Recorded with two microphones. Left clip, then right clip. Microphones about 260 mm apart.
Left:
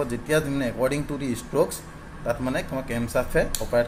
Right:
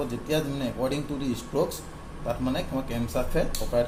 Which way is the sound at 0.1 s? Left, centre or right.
Left.